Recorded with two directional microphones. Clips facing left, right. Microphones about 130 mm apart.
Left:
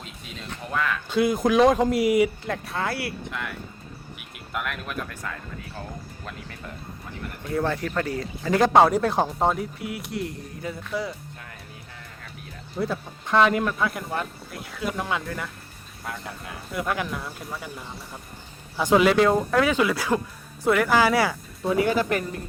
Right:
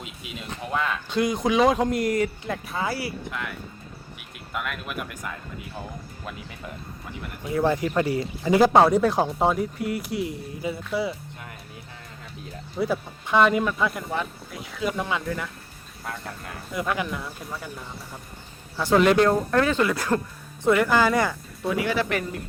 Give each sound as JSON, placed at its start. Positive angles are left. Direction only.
{"t": 0.0, "sound": "speech", "side_deg": -10}
{"t": 1.1, "sound": "speech", "side_deg": 5}
{"t": 7.4, "sound": "speech", "side_deg": -15}
{"t": 12.7, "sound": "speech", "side_deg": 0}
{"t": 21.7, "sound": "speech", "side_deg": 40}